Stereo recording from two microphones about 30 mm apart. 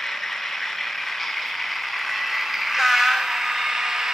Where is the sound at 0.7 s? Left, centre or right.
Centre.